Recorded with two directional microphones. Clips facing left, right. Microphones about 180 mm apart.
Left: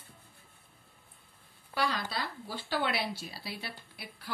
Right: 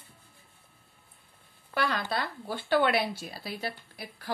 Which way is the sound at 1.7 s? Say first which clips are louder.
Right 3 dB; 55° right (ahead or behind).